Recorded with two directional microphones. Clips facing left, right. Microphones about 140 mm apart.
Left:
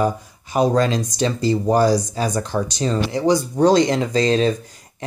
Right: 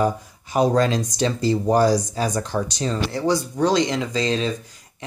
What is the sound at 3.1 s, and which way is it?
Speech, 15° left (ahead or behind).